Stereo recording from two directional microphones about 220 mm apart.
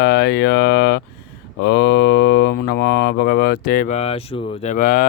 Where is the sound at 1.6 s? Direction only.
50° left (ahead or behind).